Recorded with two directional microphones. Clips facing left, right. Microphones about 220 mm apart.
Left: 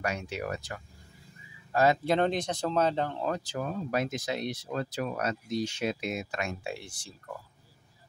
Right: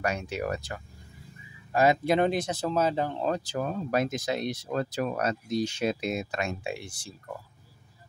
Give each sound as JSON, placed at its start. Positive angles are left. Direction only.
{"t": 0.0, "sound": "speech", "side_deg": -40}
{"t": 1.7, "sound": "speech", "side_deg": -15}
{"t": 3.2, "sound": "speech", "side_deg": -30}
{"t": 6.6, "sound": "speech", "side_deg": -15}